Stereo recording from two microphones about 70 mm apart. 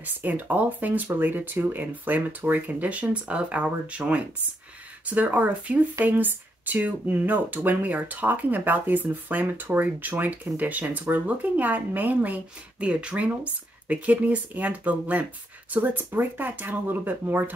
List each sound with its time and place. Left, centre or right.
0.0 s speech: right